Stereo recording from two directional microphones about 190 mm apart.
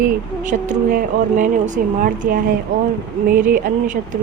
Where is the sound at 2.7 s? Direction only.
90° right.